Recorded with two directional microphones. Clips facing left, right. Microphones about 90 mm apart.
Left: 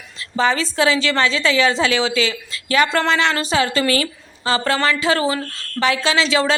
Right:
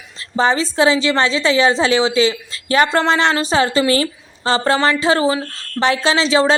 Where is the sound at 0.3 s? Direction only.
30° right (ahead or behind).